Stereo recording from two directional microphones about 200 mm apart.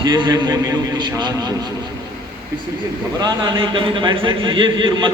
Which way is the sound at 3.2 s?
20° right (ahead or behind).